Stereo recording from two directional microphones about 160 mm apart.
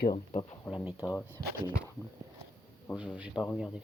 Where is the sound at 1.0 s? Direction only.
15° left (ahead or behind).